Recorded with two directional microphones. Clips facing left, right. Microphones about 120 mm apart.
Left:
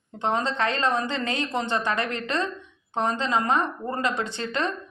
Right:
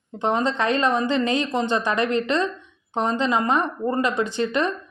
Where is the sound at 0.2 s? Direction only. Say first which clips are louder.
Right 3 dB; 20° right (ahead or behind).